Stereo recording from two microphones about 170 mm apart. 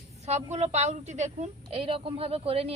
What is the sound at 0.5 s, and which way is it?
A woman's voice, 40° right (ahead or behind).